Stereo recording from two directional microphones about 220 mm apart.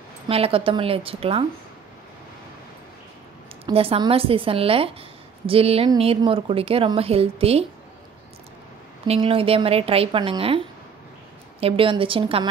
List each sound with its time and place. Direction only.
0.3 s a woman's voice: 25° right (ahead or behind)
3.6 s a woman's voice: 25° right (ahead or behind)
9.0 s a woman's voice: 25° right (ahead or behind)
11.6 s a woman's voice: 25° right (ahead or behind)